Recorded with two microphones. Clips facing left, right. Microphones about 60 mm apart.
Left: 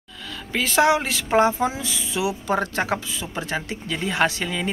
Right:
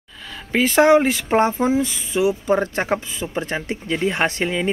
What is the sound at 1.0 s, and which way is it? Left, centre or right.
Speech, centre.